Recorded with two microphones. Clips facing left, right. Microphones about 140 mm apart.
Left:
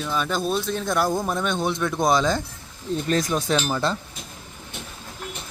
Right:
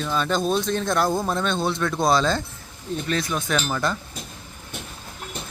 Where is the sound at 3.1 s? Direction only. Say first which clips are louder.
Left 3 dB; 40° left (ahead or behind).